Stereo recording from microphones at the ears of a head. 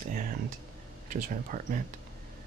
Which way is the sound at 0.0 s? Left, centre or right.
Right.